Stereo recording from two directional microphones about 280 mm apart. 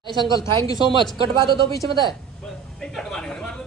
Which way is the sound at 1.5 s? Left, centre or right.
Left.